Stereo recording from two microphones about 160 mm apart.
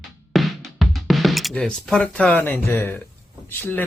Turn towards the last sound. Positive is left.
turn(degrees=10)  # may be behind; listen again after turning